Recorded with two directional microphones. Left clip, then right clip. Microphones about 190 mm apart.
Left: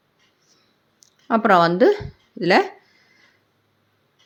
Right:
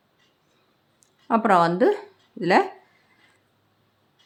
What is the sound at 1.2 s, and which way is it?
Speech, 10° left (ahead or behind).